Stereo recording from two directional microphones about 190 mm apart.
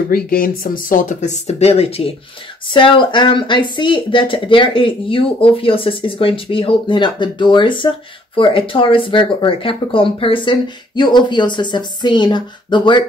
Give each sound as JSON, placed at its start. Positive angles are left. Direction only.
{"t": 0.1, "sound": "speech", "side_deg": 50}